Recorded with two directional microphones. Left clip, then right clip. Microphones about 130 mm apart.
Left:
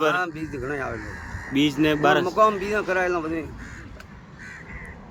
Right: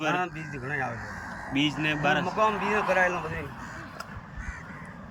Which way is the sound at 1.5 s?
45° left (ahead or behind).